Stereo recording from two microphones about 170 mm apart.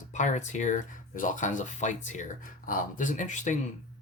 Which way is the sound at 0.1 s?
45° left (ahead or behind).